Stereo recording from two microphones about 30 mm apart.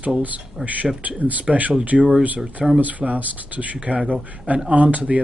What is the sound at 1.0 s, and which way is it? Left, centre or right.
Speech, right.